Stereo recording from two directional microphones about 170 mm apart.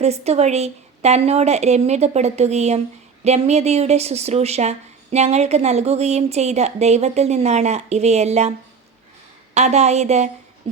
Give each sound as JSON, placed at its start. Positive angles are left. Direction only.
{"t": 0.0, "sound": "a woman's voice", "side_deg": -40}
{"t": 9.6, "sound": "a woman's voice", "side_deg": -40}